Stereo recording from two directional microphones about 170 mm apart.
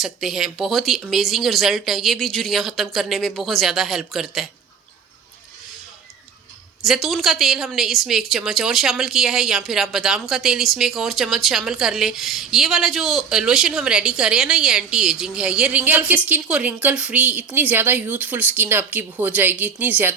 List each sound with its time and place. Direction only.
0.0 s a woman's voice: centre (ahead or behind)
6.8 s a woman's voice: centre (ahead or behind)